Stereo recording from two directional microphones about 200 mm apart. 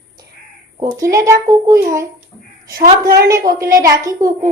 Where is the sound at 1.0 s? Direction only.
15° right (ahead or behind).